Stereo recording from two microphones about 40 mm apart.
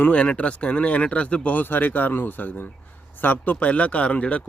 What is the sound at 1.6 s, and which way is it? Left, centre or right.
Speech, left.